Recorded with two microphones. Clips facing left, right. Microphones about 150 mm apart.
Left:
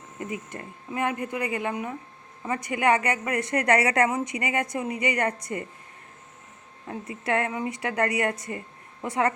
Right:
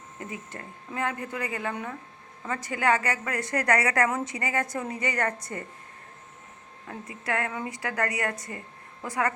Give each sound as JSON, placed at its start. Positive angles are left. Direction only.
{"t": 0.2, "sound": "a woman's voice", "side_deg": 20}
{"t": 6.8, "sound": "a woman's voice", "side_deg": 25}